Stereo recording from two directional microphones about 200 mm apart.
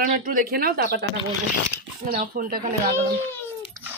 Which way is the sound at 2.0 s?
45° right (ahead or behind).